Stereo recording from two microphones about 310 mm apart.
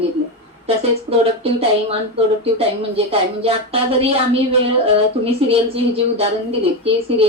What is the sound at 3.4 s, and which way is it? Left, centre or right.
Speech, centre.